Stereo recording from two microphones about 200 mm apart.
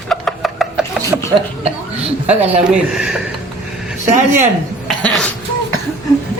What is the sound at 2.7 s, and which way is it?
Speech, 5° right (ahead or behind).